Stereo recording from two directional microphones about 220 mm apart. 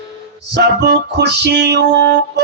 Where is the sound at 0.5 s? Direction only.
50° right (ahead or behind).